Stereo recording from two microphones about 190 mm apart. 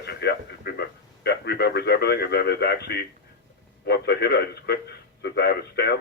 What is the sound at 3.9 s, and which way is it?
Speech, 55° left (ahead or behind).